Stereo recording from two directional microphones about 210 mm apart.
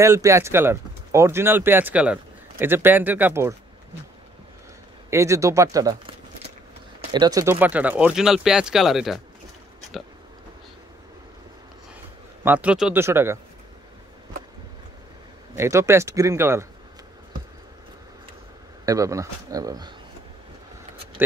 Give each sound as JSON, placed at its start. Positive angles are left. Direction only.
{"t": 0.0, "sound": "speech", "side_deg": -15}
{"t": 5.1, "sound": "speech", "side_deg": -15}
{"t": 12.4, "sound": "speech", "side_deg": -5}
{"t": 15.5, "sound": "speech", "side_deg": -15}
{"t": 18.9, "sound": "speech", "side_deg": -15}